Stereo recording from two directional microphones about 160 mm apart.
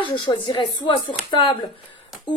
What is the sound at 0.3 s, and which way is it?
A woman's voice, 30° left (ahead or behind).